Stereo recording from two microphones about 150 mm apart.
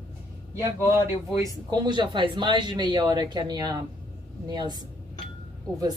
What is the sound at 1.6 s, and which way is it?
Speech, 30° right (ahead or behind).